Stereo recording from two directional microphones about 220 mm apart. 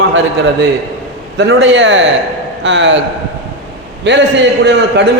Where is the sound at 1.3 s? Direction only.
55° right (ahead or behind).